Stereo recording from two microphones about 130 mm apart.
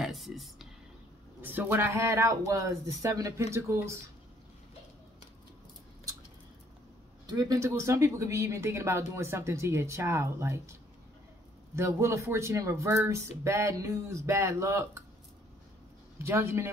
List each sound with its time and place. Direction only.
0.0 s a sound: centre (ahead or behind)
1.4 s speech: 15° right (ahead or behind)
7.2 s speech: 30° right (ahead or behind)
16.2 s speech: 20° right (ahead or behind)